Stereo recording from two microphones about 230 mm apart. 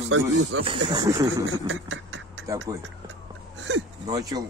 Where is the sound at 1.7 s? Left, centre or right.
Right.